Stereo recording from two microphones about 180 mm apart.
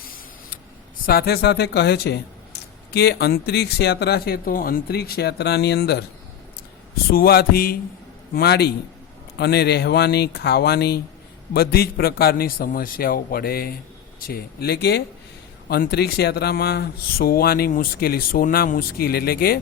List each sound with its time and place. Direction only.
1.0 s speech: 60° left (ahead or behind)
7.1 s speech: 55° left (ahead or behind)